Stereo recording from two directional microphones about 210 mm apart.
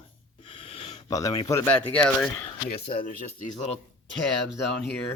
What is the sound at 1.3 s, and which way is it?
Speech, 15° left (ahead or behind).